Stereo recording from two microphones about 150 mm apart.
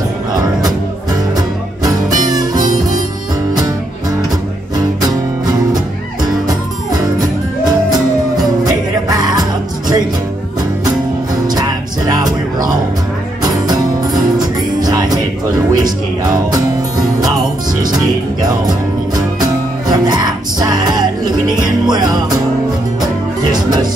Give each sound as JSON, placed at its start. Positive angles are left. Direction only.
{"t": 1.8, "sound": "music", "side_deg": -25}
{"t": 6.9, "sound": "music", "side_deg": -25}
{"t": 12.1, "sound": "music", "side_deg": -25}
{"t": 17.9, "sound": "music", "side_deg": -25}
{"t": 23.5, "sound": "music", "side_deg": -25}